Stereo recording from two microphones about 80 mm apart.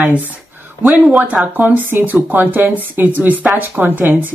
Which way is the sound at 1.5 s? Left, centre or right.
Right.